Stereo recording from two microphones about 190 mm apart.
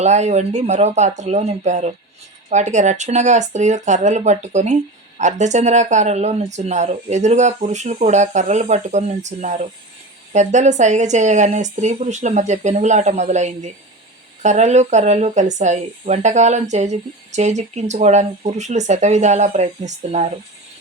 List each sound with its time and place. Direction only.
0.0 s speech: 35° right (ahead or behind)